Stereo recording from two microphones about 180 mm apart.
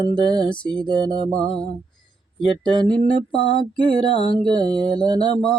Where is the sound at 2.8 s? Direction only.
25° right (ahead or behind).